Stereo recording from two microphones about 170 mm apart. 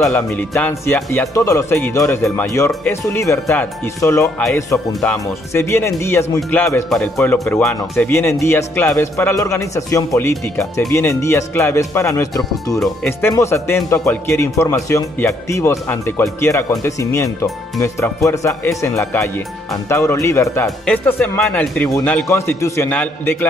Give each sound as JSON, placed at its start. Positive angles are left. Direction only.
{"t": 0.0, "sound": "speech", "side_deg": 10}
{"t": 5.5, "sound": "speech", "side_deg": 15}
{"t": 12.7, "sound": "speech", "side_deg": 0}
{"t": 13.2, "sound": "speech", "side_deg": 15}